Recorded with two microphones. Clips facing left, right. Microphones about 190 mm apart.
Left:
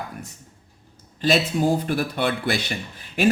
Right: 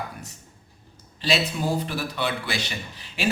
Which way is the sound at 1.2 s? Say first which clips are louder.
Left 5 dB; 50° left (ahead or behind).